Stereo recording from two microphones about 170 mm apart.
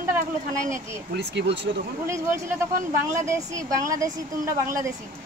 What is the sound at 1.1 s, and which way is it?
Speech, 90° right.